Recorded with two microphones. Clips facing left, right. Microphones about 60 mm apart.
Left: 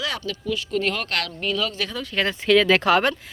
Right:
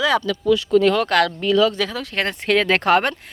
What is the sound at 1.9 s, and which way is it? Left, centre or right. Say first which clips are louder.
Speech: right 1 dB; right.